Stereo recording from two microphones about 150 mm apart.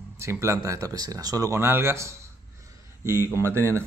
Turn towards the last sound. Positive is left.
turn(degrees=-15)  # may be behind; listen again after turning